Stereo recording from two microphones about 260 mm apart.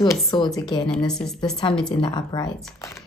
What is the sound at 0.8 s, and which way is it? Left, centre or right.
Speech, centre.